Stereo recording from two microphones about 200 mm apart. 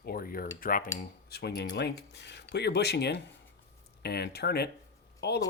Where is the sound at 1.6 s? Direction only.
55° left (ahead or behind).